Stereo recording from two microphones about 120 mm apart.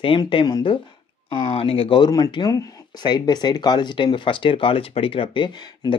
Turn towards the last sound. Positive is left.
turn(degrees=40)  # may be behind; listen again after turning